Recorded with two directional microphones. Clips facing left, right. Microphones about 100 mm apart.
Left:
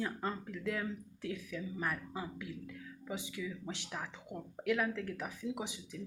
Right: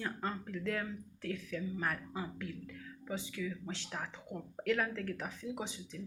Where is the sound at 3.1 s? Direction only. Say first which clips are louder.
Right 2 dB; 15° left (ahead or behind).